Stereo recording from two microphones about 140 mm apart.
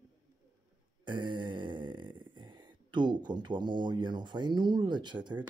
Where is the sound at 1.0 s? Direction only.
35° right (ahead or behind).